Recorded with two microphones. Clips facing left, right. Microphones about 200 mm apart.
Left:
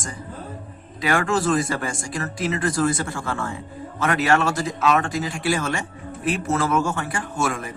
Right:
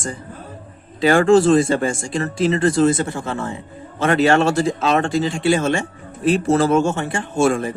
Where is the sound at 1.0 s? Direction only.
30° right (ahead or behind).